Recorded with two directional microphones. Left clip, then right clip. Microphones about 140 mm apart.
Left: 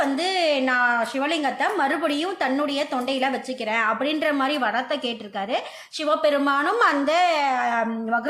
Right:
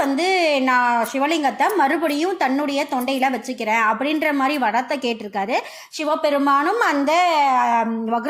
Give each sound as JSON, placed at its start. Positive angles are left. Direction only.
{"t": 0.0, "sound": "a woman's voice", "side_deg": -15}